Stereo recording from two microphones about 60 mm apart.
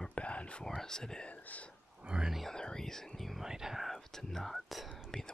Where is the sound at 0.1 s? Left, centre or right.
Left.